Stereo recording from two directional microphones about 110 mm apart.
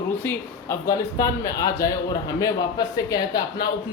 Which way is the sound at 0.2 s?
20° left (ahead or behind).